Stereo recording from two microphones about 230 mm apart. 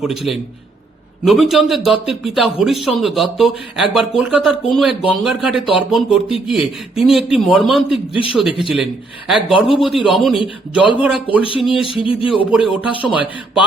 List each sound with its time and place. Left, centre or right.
0.0 s speech: centre
11.4 s speech: left
11.7 s speech: centre